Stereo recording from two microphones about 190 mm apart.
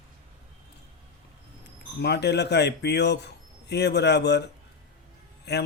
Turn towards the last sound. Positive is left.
turn(degrees=60)  # may be behind; listen again after turning